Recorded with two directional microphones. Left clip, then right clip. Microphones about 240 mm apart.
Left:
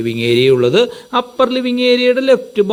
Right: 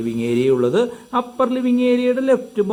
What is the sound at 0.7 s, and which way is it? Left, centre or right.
Speech, centre.